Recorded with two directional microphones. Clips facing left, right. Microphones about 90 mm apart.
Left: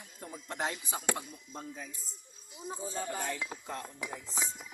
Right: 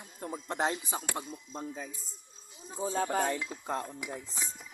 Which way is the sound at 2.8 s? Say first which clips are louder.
Right 9 dB; 90° right.